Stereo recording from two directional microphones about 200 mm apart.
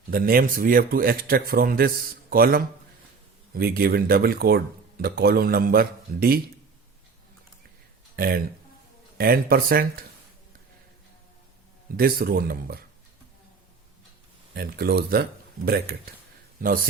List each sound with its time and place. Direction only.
0.1 s speech: 45° right (ahead or behind)
8.1 s speech: 50° right (ahead or behind)
11.9 s speech: 50° right (ahead or behind)
14.5 s speech: 50° right (ahead or behind)